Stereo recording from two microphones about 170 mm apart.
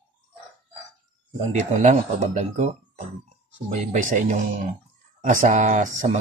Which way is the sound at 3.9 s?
45° right (ahead or behind).